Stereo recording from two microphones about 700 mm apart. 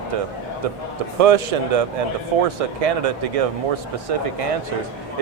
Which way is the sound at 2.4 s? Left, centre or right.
Right.